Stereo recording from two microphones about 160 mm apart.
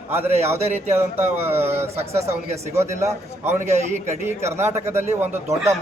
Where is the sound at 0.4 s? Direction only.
15° right (ahead or behind).